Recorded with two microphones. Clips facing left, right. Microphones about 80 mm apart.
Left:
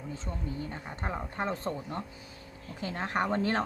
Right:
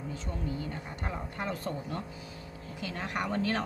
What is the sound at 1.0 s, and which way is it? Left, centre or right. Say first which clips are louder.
Speech: left 3 dB; left.